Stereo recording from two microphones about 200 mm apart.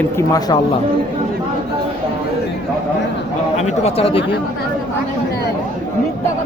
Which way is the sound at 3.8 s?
30° left (ahead or behind).